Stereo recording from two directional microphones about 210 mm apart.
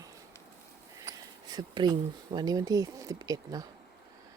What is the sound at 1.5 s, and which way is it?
Speech, 20° right (ahead or behind).